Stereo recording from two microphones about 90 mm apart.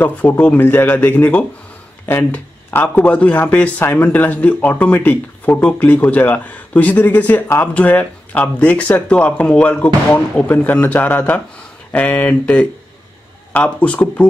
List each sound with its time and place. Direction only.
0.0 s speech: 20° left (ahead or behind)